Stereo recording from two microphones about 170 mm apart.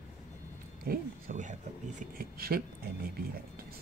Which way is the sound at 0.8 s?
55° right (ahead or behind).